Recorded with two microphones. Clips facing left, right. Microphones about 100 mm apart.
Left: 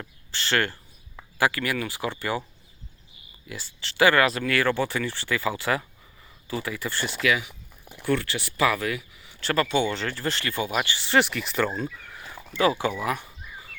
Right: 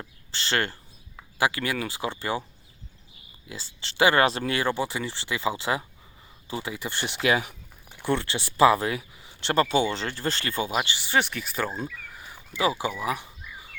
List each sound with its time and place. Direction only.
0.0 s cricket: 30° right (ahead or behind)
1.4 s speech: 25° right (ahead or behind)
3.4 s speech: 30° right (ahead or behind)
11.0 s speech: centre (ahead or behind)